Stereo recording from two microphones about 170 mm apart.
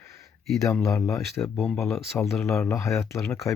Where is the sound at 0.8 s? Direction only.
20° left (ahead or behind).